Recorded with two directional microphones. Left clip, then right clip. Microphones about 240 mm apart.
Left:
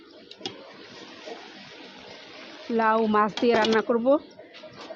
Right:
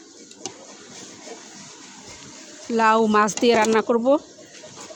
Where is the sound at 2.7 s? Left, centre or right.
Centre.